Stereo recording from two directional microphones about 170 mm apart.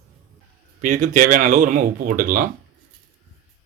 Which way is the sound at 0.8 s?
50° right (ahead or behind).